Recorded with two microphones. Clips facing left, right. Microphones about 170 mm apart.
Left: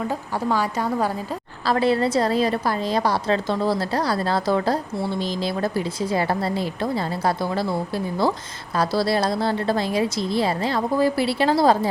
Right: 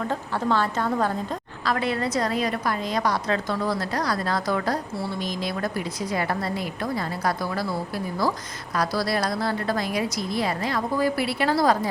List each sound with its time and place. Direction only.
0.1 s a woman's voice: 10° left (ahead or behind)
1.6 s a woman's voice: 30° left (ahead or behind)